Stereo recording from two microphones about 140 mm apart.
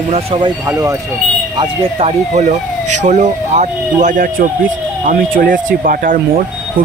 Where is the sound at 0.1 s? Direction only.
40° right (ahead or behind).